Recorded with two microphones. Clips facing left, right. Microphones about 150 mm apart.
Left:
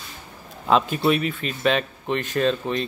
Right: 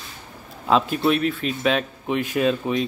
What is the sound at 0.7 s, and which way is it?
Speech, centre (ahead or behind).